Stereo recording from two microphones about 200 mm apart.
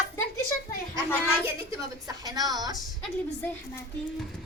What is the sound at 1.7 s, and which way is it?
Speech, 15° right (ahead or behind).